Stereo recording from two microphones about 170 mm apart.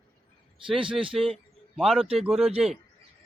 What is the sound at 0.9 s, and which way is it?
Speech, 30° right (ahead or behind).